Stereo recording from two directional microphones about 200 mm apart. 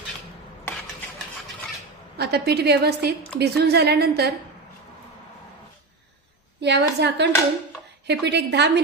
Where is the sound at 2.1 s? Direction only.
55° right (ahead or behind).